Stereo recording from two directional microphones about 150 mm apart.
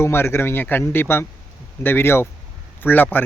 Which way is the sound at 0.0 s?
15° left (ahead or behind).